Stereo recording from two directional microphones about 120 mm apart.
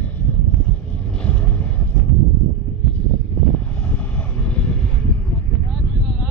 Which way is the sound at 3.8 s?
10° left (ahead or behind).